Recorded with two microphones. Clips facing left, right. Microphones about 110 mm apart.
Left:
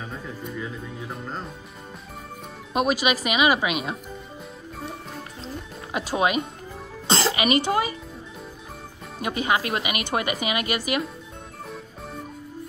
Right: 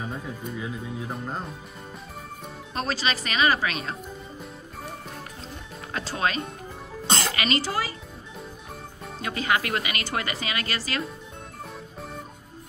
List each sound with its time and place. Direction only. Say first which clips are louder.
0.4 s speech: even; 5° right (ahead or behind)
2.7 s a woman's voice: left 6 dB; 15° left (ahead or behind)
5.9 s speech: left 4 dB; 15° left (ahead or behind)
7.1 s cough: left 4 dB; 30° left (ahead or behind)
7.4 s a woman's voice: left 6 dB; 20° left (ahead or behind)
9.2 s a woman's voice: left 2 dB; 20° left (ahead or behind)